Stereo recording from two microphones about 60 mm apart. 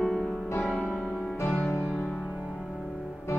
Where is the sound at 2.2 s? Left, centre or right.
Centre.